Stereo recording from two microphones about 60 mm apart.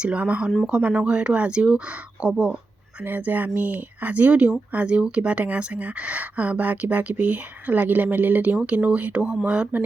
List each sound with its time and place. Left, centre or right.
0.0 s speech: right
3.0 s speech: right